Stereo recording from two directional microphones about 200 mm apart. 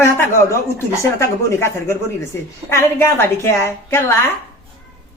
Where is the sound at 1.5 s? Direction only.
15° left (ahead or behind).